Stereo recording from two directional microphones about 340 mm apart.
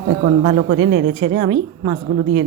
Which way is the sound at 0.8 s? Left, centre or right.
Right.